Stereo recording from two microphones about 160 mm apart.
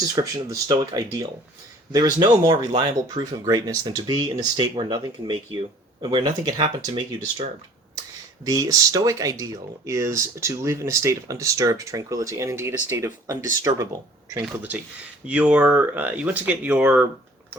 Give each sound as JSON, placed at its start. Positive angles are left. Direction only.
{"t": 0.2, "sound": "speech", "side_deg": -20}
{"t": 8.4, "sound": "speech", "side_deg": -20}